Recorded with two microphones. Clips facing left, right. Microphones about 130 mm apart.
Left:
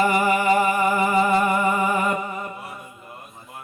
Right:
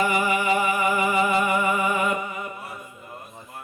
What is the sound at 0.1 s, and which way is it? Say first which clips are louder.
Music: left 3 dB; 40° left (ahead or behind).